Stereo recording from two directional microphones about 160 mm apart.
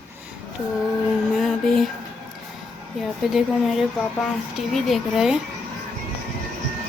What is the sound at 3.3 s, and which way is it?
Speech, centre (ahead or behind).